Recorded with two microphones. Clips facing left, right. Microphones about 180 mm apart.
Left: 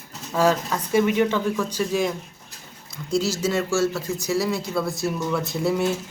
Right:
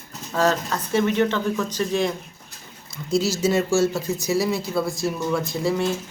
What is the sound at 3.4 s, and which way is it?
Speech, 20° right (ahead or behind).